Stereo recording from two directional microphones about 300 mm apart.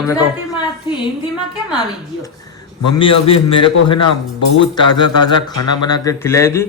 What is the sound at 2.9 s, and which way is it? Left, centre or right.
A man's voice, centre.